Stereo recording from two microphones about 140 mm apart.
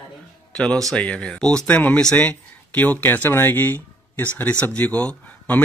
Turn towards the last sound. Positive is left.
turn(degrees=10)  # may be behind; listen again after turning